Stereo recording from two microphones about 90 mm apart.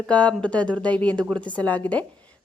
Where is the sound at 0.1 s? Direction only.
15° left (ahead or behind).